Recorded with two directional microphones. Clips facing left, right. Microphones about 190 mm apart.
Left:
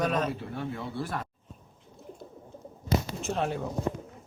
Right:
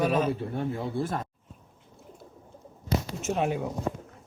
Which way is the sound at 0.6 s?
25° right (ahead or behind).